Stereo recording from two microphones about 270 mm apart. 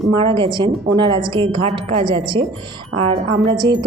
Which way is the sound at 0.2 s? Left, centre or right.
Centre.